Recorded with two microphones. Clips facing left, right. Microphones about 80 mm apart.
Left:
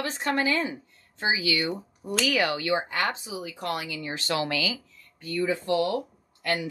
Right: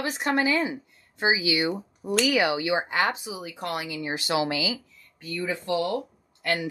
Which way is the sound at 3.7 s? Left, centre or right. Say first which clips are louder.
Right 2 dB; right.